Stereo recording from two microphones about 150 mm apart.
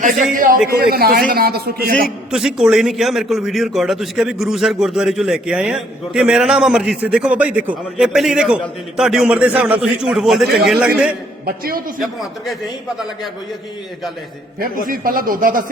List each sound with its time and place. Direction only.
0.3 s a man's voice: 60° right (ahead or behind)
0.7 s a man's voice: 90° right
2.3 s a man's voice: 5° right (ahead or behind)
11.4 s a man's voice: 85° right
11.9 s a man's voice: centre (ahead or behind)
14.8 s speech: 70° right (ahead or behind)